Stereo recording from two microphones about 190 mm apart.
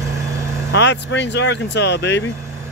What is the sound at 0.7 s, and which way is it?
Speech, 70° left (ahead or behind).